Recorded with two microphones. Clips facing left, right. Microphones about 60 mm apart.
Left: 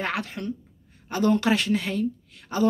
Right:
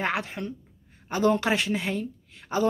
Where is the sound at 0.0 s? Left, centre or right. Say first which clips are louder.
Even; right.